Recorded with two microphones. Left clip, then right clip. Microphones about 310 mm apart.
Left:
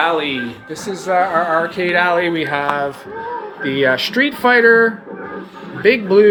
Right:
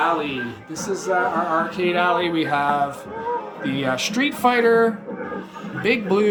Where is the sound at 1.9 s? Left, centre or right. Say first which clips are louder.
Left 5 dB; right.